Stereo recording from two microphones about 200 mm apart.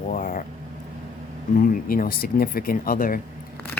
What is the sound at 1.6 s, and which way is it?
Speech, 45° left (ahead or behind).